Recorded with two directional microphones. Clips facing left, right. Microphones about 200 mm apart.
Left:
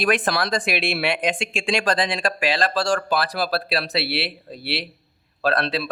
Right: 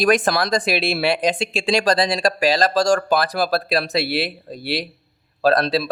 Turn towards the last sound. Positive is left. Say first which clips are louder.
# right 5 dB
turn(degrees=-40)  # may be behind; listen again after turning